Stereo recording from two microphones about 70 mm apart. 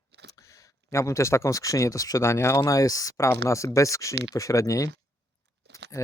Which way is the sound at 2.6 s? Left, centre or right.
Left.